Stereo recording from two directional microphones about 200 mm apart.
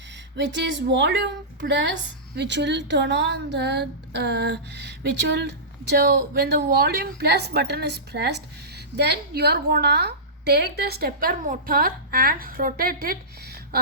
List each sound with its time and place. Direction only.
0.3 s a woman's voice: 60° right (ahead or behind)